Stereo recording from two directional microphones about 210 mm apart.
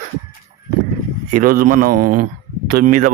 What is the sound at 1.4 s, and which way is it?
Speech, 40° right (ahead or behind).